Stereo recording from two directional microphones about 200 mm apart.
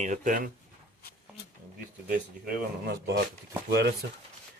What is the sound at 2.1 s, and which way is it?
Speech, 50° right (ahead or behind).